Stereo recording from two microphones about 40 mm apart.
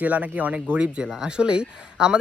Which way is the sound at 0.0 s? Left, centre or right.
Right.